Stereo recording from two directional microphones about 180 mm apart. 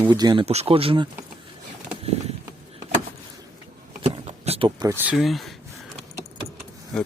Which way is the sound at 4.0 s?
35° right (ahead or behind).